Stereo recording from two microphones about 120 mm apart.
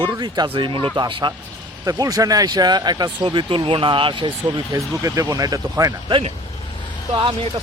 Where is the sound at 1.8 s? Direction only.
30° right (ahead or behind).